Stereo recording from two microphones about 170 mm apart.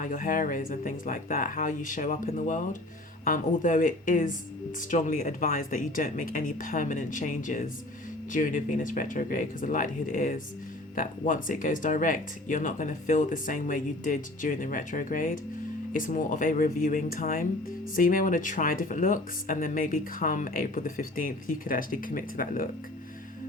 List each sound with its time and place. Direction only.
0.0 s speech: 55° left (ahead or behind)